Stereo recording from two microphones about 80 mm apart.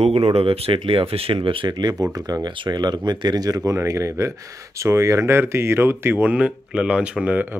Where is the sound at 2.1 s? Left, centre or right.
Right.